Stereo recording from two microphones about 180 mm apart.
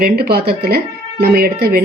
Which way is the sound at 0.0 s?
60° right (ahead or behind).